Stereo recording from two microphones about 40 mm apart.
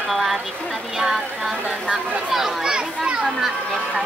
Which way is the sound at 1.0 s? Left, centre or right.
Centre.